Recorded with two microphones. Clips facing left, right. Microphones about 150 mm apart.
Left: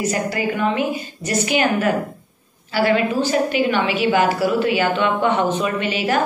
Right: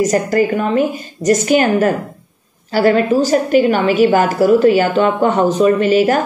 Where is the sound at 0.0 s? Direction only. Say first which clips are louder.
Right 8 dB; 45° right (ahead or behind).